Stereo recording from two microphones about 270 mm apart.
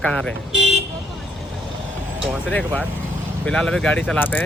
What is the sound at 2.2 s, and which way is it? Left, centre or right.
Speech, centre.